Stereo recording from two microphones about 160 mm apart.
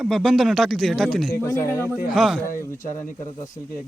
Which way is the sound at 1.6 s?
15° left (ahead or behind).